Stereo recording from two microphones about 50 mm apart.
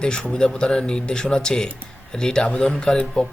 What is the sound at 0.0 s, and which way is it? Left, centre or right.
Speech, centre.